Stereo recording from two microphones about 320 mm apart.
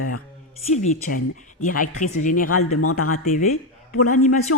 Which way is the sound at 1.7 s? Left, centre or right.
Left.